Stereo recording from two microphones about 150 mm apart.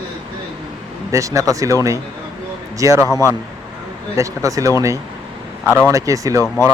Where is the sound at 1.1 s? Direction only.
20° right (ahead or behind).